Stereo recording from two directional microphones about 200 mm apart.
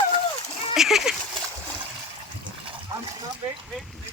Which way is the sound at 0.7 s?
Centre (ahead or behind).